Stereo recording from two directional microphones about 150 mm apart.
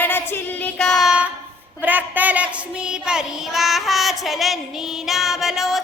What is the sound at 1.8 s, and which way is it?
Child singing, 10° right (ahead or behind).